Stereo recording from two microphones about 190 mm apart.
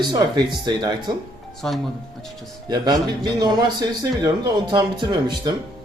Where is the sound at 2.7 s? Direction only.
20° right (ahead or behind).